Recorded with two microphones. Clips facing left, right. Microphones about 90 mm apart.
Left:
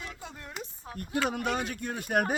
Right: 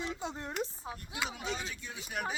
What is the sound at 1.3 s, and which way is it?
Speech, 55° left (ahead or behind).